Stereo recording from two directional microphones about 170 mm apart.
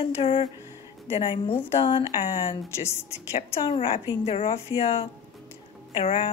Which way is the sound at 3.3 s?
35° left (ahead or behind).